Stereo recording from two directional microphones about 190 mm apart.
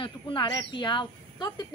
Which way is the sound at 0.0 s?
25° left (ahead or behind).